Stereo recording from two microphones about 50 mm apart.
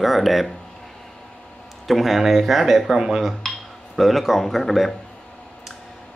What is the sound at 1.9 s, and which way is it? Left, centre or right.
Speech, centre.